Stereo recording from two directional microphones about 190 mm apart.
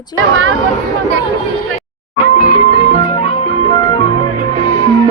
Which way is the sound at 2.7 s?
30° left (ahead or behind).